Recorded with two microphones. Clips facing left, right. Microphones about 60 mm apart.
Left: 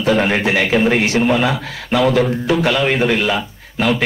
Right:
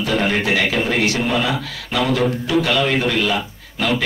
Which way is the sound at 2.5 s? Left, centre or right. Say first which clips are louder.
Left 2 dB; left.